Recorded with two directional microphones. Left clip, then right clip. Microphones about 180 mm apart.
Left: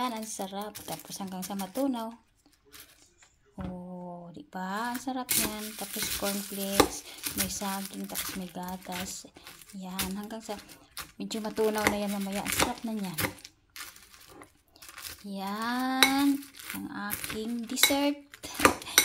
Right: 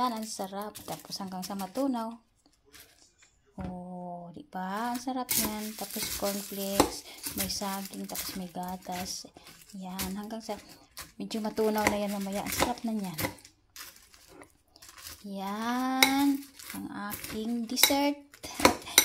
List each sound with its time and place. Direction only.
0.0 s speech: centre (ahead or behind)
3.5 s speech: centre (ahead or behind)
9.0 s speech: 40° right (ahead or behind)
9.8 s speech: 5° right (ahead or behind)
15.3 s speech: 5° right (ahead or behind)